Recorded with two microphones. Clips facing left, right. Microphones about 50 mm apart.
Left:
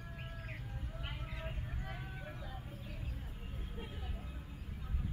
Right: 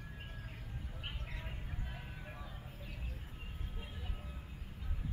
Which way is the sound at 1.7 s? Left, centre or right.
Left.